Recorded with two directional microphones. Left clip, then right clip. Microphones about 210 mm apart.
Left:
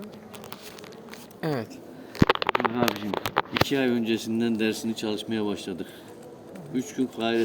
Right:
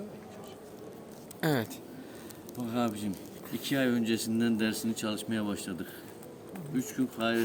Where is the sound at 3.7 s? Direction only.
15° right (ahead or behind).